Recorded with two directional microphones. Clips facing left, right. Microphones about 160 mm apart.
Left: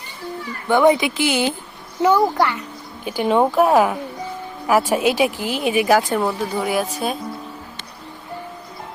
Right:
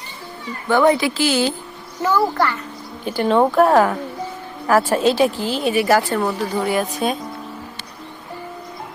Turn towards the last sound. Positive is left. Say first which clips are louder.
# right 1 dB
turn(degrees=5)  # may be behind; listen again after turning